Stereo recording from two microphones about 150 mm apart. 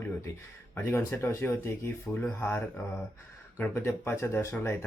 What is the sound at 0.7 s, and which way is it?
Speech, 15° left (ahead or behind).